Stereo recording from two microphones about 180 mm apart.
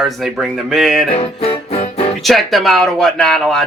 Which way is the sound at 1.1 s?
35° left (ahead or behind).